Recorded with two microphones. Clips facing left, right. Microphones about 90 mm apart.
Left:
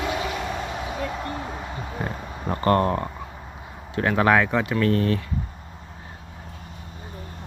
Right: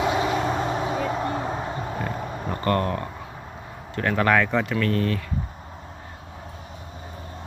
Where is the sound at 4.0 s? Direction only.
10° left (ahead or behind).